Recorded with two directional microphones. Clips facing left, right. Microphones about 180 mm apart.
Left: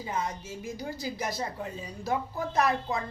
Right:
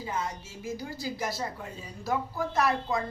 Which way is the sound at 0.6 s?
20° left (ahead or behind).